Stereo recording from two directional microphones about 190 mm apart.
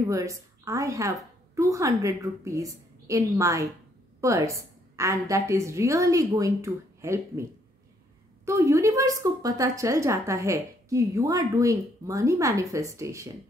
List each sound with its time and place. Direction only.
0.0 s a woman's voice: 15° right (ahead or behind)
8.5 s a woman's voice: 15° right (ahead or behind)